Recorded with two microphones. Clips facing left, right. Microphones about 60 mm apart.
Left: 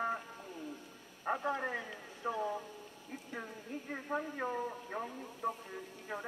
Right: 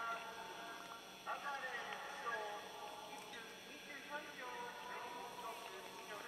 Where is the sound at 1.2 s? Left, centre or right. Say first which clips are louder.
Left 10 dB; left.